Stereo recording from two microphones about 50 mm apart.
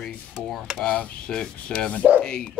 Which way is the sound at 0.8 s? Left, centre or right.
Left.